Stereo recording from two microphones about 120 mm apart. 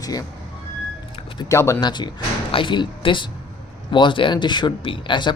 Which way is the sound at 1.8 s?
40° left (ahead or behind).